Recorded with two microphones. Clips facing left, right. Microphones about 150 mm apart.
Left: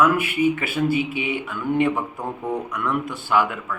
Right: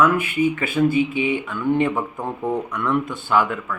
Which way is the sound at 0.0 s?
10° left (ahead or behind).